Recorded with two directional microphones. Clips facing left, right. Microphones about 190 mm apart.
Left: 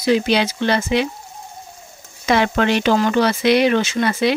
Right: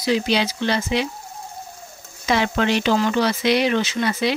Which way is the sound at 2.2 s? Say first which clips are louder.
Left 3 dB; 60° left (ahead or behind).